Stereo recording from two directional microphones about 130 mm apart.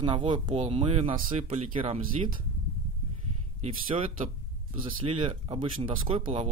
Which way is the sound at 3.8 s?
40° right (ahead or behind).